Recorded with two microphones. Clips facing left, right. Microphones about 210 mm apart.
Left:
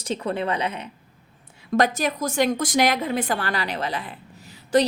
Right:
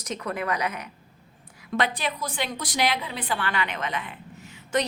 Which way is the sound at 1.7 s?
45° left (ahead or behind).